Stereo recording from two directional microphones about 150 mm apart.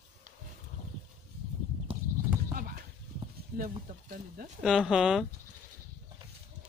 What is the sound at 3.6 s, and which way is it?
Speech, 70° right (ahead or behind).